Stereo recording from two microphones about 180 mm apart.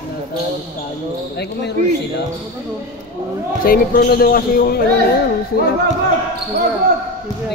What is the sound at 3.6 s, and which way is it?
Speech, 55° left (ahead or behind).